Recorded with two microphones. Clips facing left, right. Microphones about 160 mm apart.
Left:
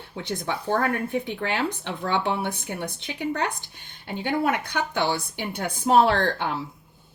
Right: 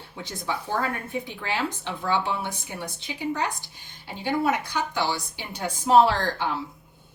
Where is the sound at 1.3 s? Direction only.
60° left (ahead or behind).